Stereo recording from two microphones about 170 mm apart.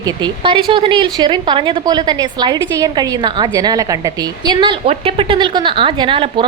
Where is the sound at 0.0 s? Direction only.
30° right (ahead or behind).